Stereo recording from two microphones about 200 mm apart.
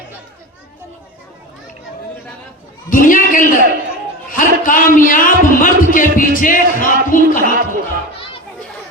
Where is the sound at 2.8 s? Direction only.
40° left (ahead or behind).